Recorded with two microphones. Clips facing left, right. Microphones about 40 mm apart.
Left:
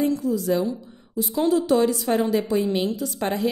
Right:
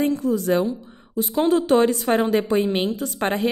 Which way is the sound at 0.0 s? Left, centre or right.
Right.